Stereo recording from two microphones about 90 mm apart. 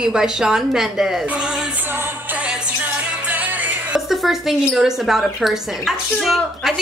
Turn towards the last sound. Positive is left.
turn(degrees=0)  # may be behind; listen again after turning